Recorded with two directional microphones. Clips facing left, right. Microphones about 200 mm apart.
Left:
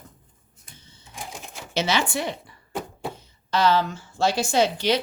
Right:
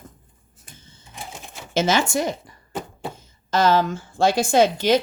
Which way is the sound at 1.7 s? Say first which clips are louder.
Right 4 dB; 45° right (ahead or behind).